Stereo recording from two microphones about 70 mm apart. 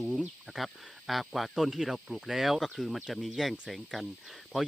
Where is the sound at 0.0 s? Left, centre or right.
Centre.